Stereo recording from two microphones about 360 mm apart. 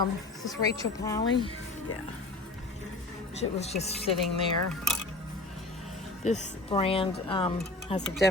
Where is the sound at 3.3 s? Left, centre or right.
Centre.